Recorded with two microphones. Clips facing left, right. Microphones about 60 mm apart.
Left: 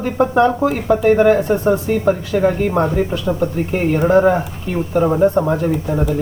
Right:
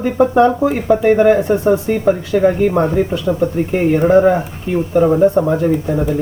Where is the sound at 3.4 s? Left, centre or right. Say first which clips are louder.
Right 3 dB; centre.